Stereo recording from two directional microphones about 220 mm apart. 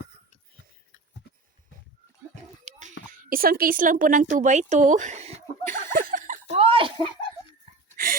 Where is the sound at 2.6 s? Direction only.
35° right (ahead or behind).